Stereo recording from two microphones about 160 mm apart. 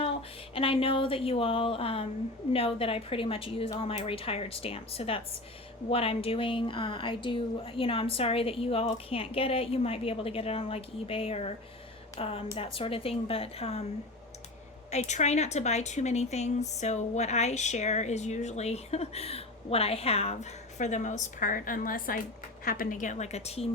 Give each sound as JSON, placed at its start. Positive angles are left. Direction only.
{"t": 0.5, "sound": "a woman's voice", "side_deg": 35}
{"t": 14.8, "sound": "speech", "side_deg": 45}